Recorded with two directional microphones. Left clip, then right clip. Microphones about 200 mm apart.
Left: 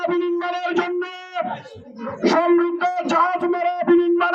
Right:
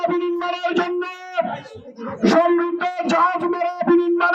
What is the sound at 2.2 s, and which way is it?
Dog, centre (ahead or behind).